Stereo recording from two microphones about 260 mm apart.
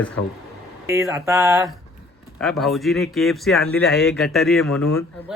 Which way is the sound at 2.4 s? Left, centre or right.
Centre.